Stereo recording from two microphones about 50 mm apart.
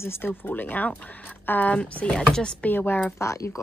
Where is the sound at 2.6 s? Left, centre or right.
Left.